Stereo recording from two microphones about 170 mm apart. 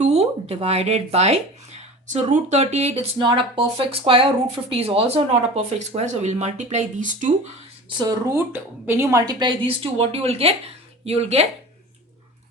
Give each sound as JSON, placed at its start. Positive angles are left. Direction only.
{"t": 0.0, "sound": "speech", "side_deg": -40}
{"t": 7.9, "sound": "a woman's voice", "side_deg": -25}